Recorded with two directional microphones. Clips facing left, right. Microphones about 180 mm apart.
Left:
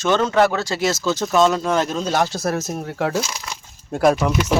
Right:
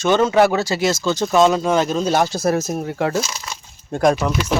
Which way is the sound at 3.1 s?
15° left (ahead or behind).